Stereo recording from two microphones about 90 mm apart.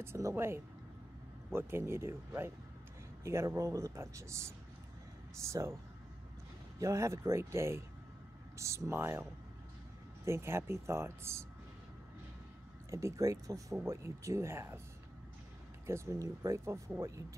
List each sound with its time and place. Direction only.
0.0 s speech: 30° right (ahead or behind)
6.8 s speech: 35° right (ahead or behind)
10.2 s speech: 30° right (ahead or behind)
12.9 s speech: 35° right (ahead or behind)
15.9 s speech: 35° right (ahead or behind)